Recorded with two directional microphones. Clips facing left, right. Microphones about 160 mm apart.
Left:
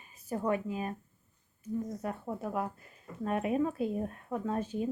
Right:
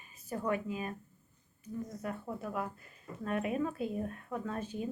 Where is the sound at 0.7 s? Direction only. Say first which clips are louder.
Left 2 dB; 35° left (ahead or behind).